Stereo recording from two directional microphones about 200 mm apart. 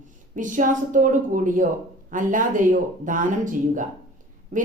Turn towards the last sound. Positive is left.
turn(degrees=-40)  # may be behind; listen again after turning